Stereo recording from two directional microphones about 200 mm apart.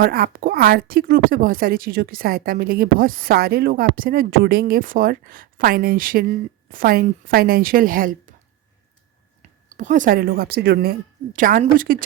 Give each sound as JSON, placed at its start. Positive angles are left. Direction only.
{"t": 0.0, "sound": "a woman's voice", "side_deg": -45}
{"t": 9.6, "sound": "a woman's voice", "side_deg": -40}